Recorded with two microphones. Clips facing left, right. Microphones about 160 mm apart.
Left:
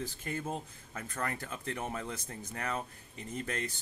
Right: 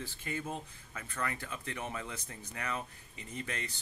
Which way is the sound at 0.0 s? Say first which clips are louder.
Left 2 dB; 45° left (ahead or behind).